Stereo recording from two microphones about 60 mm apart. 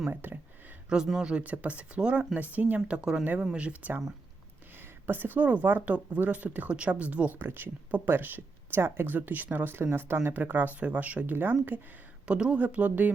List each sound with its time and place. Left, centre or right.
0.1 s speech: right
0.9 s speech: centre
5.0 s speech: right
12.3 s speech: centre